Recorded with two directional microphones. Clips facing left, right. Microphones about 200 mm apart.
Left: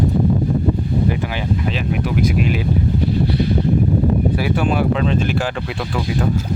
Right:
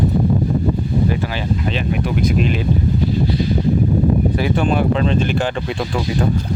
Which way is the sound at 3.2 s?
60° left (ahead or behind).